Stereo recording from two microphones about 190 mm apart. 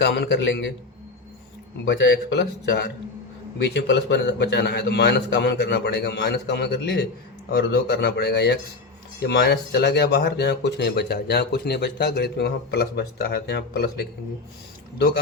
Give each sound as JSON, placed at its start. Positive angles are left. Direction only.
{"t": 0.0, "sound": "speech", "side_deg": 60}
{"t": 1.9, "sound": "speech", "side_deg": 65}